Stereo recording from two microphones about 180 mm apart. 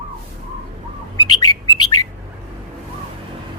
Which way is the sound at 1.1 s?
20° left (ahead or behind).